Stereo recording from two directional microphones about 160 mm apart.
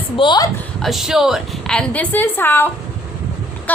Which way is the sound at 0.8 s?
Centre (ahead or behind).